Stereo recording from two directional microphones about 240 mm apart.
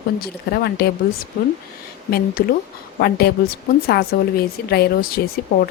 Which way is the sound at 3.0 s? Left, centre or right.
Left.